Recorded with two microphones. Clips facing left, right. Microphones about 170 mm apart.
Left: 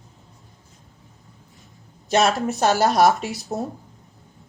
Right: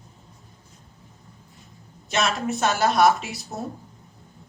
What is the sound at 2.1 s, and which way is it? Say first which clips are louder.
Speech: left 6 dB; 35° left (ahead or behind).